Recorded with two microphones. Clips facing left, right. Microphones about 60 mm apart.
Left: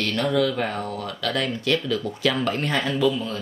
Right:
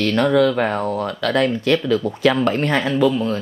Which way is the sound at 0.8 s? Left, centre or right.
Right.